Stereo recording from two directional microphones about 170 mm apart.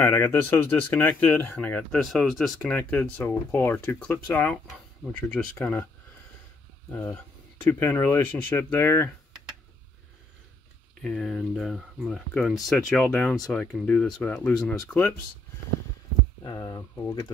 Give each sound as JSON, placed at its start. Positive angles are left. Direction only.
{"t": 0.0, "sound": "speech", "side_deg": 15}
{"t": 6.9, "sound": "speech", "side_deg": 10}
{"t": 11.0, "sound": "speech", "side_deg": 0}
{"t": 16.4, "sound": "speech", "side_deg": 20}